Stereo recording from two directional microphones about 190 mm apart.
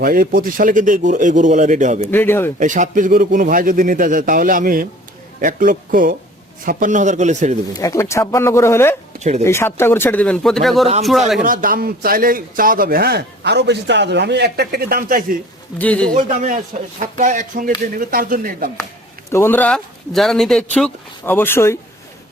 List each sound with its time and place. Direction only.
0.0 s speech: 50° right (ahead or behind)
2.0 s speech: 10° left (ahead or behind)
2.6 s a man's voice: 40° right (ahead or behind)
7.8 s speech: 15° left (ahead or behind); by 10.8 s centre (ahead or behind)
11.4 s a man's voice: 45° right (ahead or behind)
15.8 s speech: 5° left (ahead or behind)
16.1 s a man's voice: 40° right (ahead or behind)
19.3 s speech: 10° left (ahead or behind)